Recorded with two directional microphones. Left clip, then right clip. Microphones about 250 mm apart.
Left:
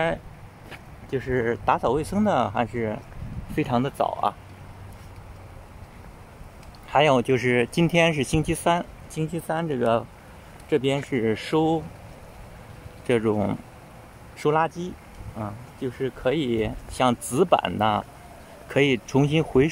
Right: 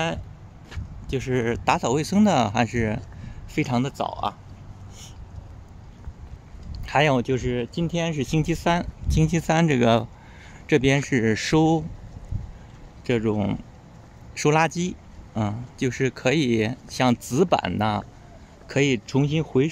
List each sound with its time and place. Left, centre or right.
0.7 s speech: centre
6.9 s speech: centre
13.0 s speech: centre
14.4 s speech: centre